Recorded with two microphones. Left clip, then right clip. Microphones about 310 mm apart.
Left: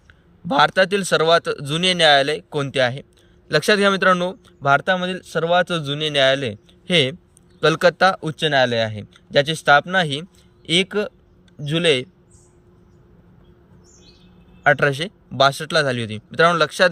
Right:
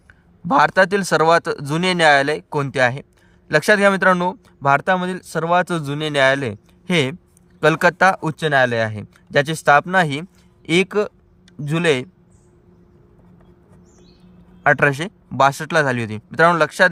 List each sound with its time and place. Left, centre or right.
0.1 s speech: centre
14.6 s speech: centre